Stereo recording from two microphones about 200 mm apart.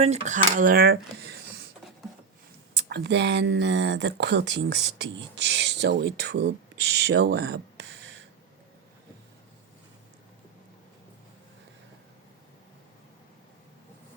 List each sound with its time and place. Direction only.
0.0 s speech: 35° right (ahead or behind); by 1.7 s 55° right (ahead or behind)
2.7 s speech: 60° right (ahead or behind)